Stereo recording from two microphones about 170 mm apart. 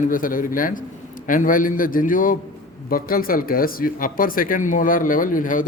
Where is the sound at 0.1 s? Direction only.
55° left (ahead or behind).